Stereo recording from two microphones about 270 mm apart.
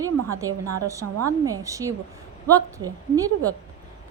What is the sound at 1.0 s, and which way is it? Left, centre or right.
Speech, right.